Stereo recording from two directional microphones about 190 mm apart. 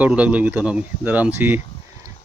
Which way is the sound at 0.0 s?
5° right (ahead or behind).